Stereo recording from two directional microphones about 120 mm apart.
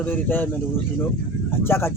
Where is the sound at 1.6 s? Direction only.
20° left (ahead or behind).